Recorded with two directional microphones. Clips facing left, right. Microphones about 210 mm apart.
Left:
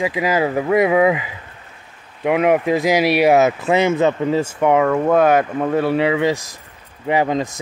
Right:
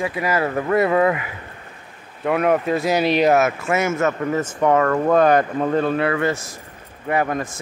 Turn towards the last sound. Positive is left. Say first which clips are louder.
# left 3 dB
turn(degrees=20)  # may be behind; listen again after turning